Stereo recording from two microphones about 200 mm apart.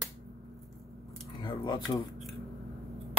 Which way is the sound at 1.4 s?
25° left (ahead or behind).